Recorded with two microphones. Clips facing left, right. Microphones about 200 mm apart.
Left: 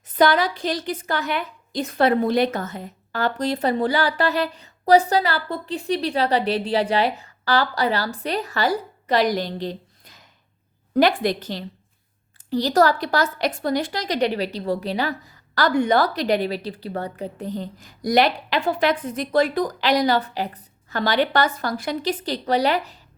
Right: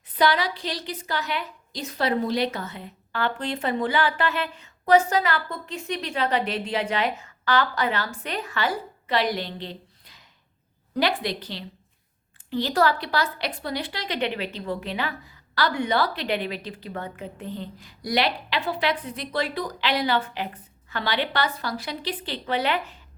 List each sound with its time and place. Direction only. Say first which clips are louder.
0.2 s a woman's voice: left 4 dB; 45° left (ahead or behind)